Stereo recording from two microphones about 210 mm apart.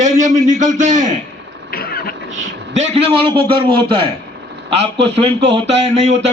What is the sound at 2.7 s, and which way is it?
Speech, 30° right (ahead or behind).